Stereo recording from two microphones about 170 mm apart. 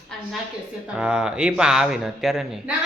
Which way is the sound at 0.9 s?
5° right (ahead or behind).